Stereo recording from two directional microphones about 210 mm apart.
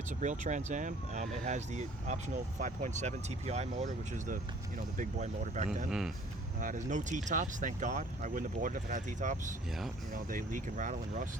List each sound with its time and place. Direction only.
0.2 s speech: 35° right (ahead or behind)